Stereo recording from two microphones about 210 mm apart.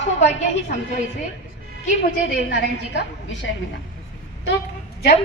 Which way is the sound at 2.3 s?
55° left (ahead or behind).